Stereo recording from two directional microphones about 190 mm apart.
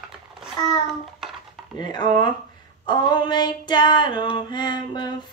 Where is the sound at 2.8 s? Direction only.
20° left (ahead or behind).